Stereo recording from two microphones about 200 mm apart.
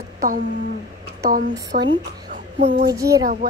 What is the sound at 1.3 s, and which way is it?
Speech, 60° right (ahead or behind).